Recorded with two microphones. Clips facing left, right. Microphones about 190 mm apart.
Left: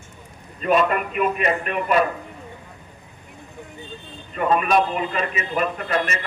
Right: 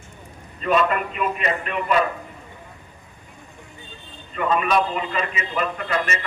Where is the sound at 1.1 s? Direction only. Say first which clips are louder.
Left 3 dB; 50° left (ahead or behind).